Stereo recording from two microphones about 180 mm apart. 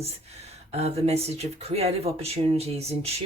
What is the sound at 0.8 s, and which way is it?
Speech, 35° right (ahead or behind).